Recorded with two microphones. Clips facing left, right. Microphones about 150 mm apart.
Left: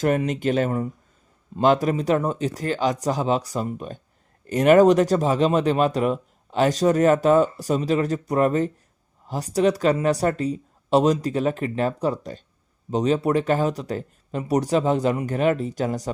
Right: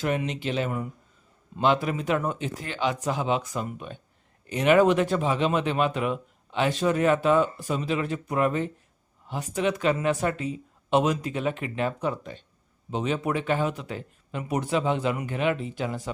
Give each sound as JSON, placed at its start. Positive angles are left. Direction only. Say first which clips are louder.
{"t": 0.0, "sound": "speech", "louder": "left 6 dB", "side_deg": 45}